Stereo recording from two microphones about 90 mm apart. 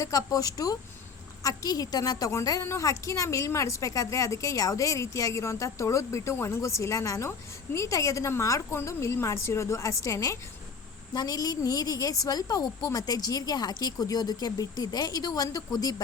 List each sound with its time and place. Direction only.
0.0 s a woman's voice: 40° left (ahead or behind)
11.1 s a woman's voice: 50° left (ahead or behind)